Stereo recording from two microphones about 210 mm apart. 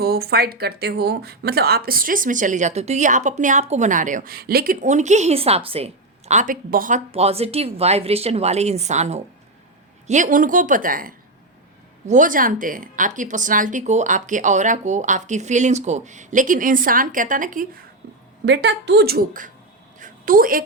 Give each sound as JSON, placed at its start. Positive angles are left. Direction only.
{"t": 0.0, "sound": "speech", "side_deg": -50}
{"t": 18.0, "sound": "a sound", "side_deg": -40}
{"t": 18.4, "sound": "a woman's voice", "side_deg": -55}